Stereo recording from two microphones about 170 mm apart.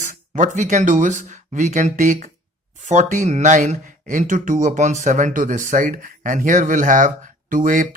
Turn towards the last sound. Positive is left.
turn(degrees=-55)  # may be behind; listen again after turning